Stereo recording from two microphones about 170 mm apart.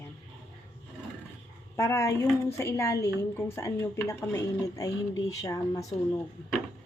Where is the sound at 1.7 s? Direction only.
15° left (ahead or behind).